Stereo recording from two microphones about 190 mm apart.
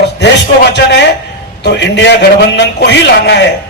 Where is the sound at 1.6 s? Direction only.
65° left (ahead or behind).